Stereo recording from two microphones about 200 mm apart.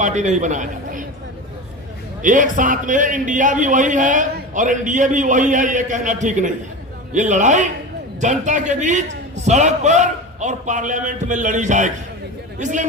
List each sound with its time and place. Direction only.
0.0 s a man's voice: 35° right (ahead or behind)
2.2 s a man's voice: 40° right (ahead or behind)